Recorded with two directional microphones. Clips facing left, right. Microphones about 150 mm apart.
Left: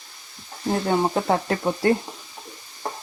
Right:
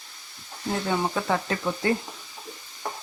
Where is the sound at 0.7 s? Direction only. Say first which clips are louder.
Left 5 dB; 35° left (ahead or behind).